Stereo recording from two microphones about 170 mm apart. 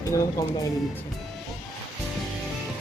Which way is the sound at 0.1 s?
15° left (ahead or behind).